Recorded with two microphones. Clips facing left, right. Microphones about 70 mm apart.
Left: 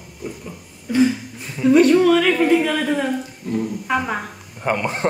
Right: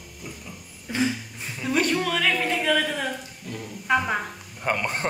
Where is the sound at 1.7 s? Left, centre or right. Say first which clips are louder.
Left 12 dB; centre.